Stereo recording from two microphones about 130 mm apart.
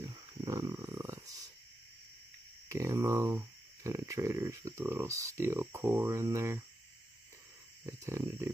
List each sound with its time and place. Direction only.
0.0 s a sound: 25° right (ahead or behind)
2.7 s speech: 20° right (ahead or behind)
7.8 s wild animals: 20° right (ahead or behind)